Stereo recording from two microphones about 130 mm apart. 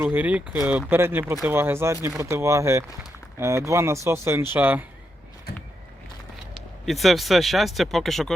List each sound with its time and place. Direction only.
0.0 s speech: 15° right (ahead or behind)
6.8 s speech: centre (ahead or behind)